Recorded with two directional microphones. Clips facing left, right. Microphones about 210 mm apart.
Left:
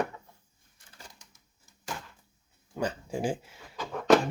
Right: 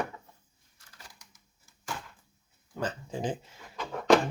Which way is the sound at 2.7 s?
15° left (ahead or behind).